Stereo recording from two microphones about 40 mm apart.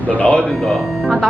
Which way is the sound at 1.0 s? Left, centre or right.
Centre.